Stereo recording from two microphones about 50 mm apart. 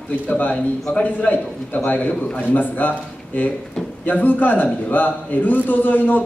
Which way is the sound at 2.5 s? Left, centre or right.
Left.